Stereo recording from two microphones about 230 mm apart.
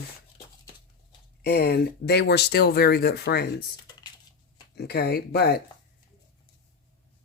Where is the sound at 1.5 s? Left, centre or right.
Left.